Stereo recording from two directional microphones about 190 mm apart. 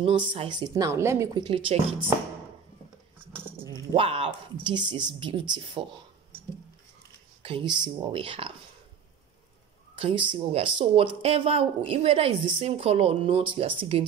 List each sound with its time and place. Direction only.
0.0 s speech: 25° right (ahead or behind)
0.7 s speech: 15° right (ahead or behind)
3.9 s speech: 30° right (ahead or behind)
7.4 s speech: 30° right (ahead or behind)
9.9 s speech: 25° right (ahead or behind)